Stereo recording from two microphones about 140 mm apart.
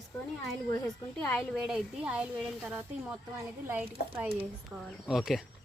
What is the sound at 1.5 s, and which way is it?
Speech, 5° right (ahead or behind).